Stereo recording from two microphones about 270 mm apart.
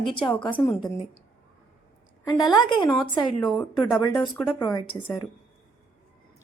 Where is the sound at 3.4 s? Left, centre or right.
Centre.